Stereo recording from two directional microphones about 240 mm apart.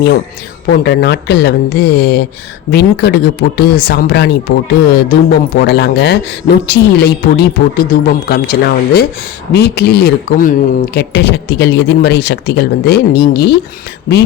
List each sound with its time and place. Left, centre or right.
0.7 s speech: left